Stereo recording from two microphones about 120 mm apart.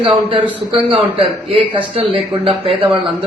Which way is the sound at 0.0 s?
50° right (ahead or behind).